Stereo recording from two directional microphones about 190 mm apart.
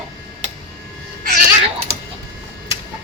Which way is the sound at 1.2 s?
50° right (ahead or behind).